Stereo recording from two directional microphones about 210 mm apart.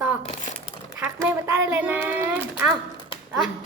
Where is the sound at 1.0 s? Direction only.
10° right (ahead or behind).